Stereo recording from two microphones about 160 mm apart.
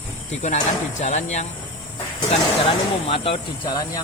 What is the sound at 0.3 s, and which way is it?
Speech, 45° left (ahead or behind).